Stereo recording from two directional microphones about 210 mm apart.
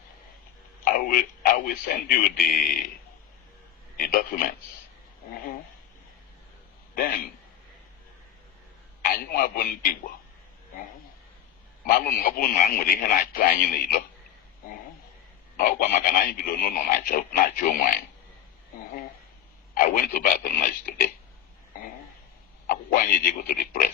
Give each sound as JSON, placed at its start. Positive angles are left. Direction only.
{"t": 0.9, "sound": "speech", "side_deg": 45}
{"t": 3.9, "sound": "speech", "side_deg": 45}
{"t": 6.9, "sound": "speech", "side_deg": 45}
{"t": 9.0, "sound": "speech", "side_deg": 45}
{"t": 11.9, "sound": "speech", "side_deg": 45}
{"t": 15.5, "sound": "speech", "side_deg": 40}
{"t": 19.7, "sound": "speech", "side_deg": 40}
{"t": 21.7, "sound": "throat clearing", "side_deg": 40}
{"t": 22.6, "sound": "speech", "side_deg": 45}